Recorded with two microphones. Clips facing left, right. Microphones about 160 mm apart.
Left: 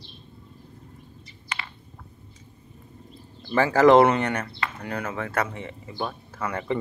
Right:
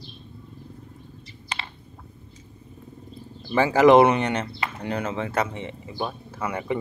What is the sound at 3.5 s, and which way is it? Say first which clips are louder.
Speech: right 1 dB; 15° right (ahead or behind).